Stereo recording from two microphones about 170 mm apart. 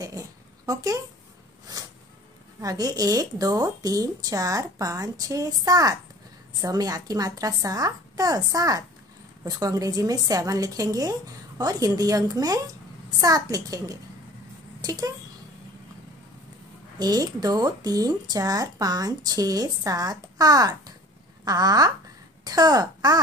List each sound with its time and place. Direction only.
0.7 s speech: 20° right (ahead or behind)
2.6 s speech: 20° right (ahead or behind)
17.0 s speech: 20° right (ahead or behind)